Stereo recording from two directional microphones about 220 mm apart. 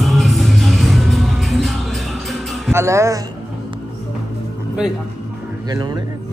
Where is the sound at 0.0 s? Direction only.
Centre (ahead or behind).